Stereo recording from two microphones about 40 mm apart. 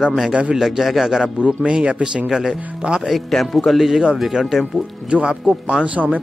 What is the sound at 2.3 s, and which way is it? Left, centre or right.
Speech, centre.